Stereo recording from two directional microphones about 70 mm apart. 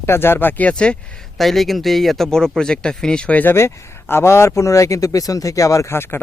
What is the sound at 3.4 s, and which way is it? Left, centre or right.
Speech, left.